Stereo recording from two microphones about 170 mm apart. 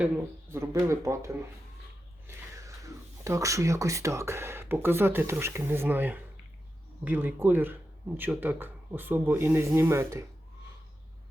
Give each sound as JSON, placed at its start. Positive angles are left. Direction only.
{"t": 0.5, "sound": "speech", "side_deg": -15}